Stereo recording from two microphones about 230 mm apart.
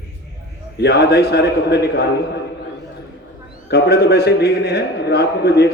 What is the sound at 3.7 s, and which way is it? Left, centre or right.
A man's voice, left.